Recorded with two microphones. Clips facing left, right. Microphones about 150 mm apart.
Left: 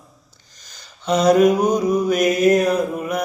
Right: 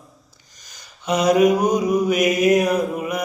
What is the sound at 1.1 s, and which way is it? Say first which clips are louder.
Mantra: left 2 dB; 10° right (ahead or behind).